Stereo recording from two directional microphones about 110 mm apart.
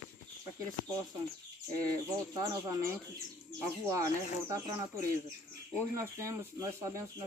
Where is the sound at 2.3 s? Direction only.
30° right (ahead or behind).